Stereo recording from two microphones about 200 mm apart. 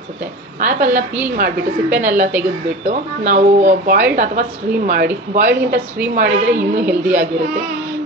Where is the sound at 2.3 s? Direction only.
10° right (ahead or behind).